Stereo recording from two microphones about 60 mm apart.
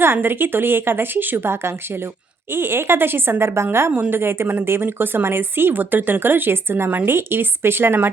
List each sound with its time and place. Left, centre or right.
0.0 s speech: right